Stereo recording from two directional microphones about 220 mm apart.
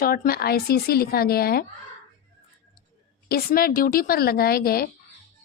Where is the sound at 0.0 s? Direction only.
40° left (ahead or behind).